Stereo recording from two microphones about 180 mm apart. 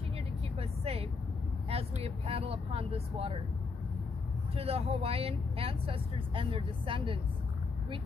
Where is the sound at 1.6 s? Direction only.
35° right (ahead or behind).